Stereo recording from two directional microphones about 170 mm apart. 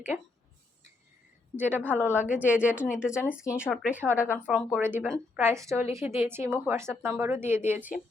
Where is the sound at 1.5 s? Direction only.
10° right (ahead or behind).